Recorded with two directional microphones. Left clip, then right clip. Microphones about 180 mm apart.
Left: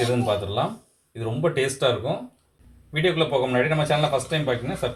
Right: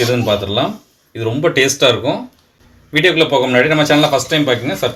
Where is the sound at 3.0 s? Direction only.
45° right (ahead or behind).